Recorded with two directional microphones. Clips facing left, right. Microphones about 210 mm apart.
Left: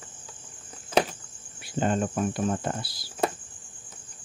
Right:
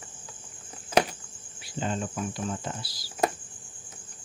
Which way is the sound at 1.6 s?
55° left (ahead or behind).